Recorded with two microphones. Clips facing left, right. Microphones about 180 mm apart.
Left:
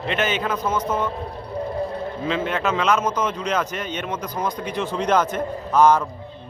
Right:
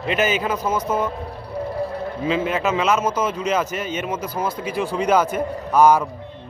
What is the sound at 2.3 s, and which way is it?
A man's voice, 5° right (ahead or behind).